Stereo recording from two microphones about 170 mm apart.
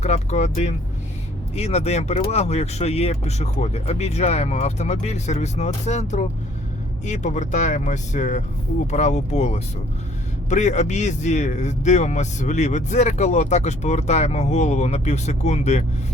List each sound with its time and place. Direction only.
0.0 s a man's voice: 40° left (ahead or behind)